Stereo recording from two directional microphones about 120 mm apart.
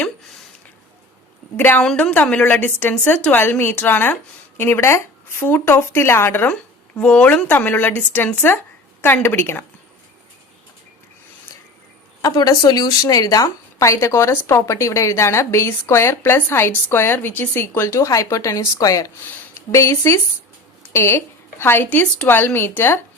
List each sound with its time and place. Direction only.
1.5 s a woman's voice: 15° left (ahead or behind)
12.2 s a woman's voice: 35° left (ahead or behind)